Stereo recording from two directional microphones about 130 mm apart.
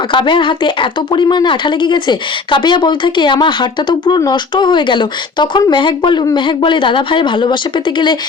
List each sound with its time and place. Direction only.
0.1 s speech: 40° left (ahead or behind)